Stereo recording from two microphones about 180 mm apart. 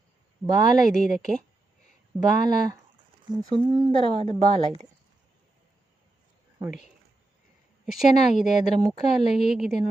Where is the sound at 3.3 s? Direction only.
25° right (ahead or behind).